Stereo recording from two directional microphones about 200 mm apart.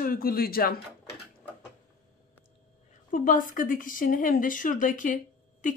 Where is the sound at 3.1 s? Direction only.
40° left (ahead or behind).